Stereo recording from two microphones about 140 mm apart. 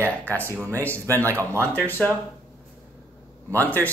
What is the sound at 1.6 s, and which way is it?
Speech, 10° left (ahead or behind).